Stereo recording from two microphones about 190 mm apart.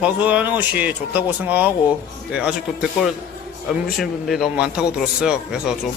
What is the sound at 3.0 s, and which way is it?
Speech, 5° right (ahead or behind).